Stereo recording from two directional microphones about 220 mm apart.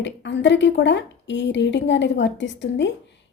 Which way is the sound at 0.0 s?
55° left (ahead or behind).